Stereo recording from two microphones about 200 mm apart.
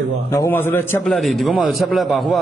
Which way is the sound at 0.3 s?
15° left (ahead or behind).